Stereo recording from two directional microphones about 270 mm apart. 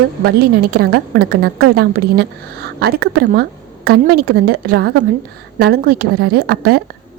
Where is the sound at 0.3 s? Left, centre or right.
Right.